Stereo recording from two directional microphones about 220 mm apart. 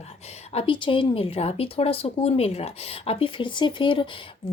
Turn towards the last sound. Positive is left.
turn(degrees=20)  # may be behind; listen again after turning